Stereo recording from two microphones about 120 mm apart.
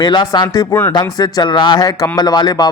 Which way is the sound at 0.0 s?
40° left (ahead or behind).